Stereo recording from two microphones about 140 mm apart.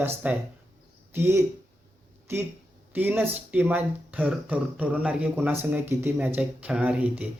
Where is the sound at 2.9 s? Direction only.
15° right (ahead or behind).